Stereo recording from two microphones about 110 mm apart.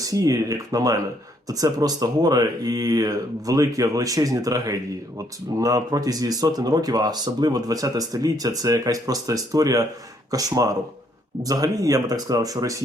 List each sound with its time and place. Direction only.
0.0 s speech: 35° right (ahead or behind)